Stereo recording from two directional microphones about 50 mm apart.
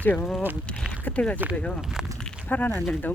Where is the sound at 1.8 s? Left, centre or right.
Centre.